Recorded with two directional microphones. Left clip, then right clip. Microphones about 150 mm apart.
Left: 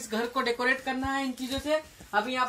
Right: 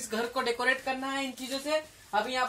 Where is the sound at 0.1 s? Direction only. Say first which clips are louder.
Left 2 dB; 20° right (ahead or behind).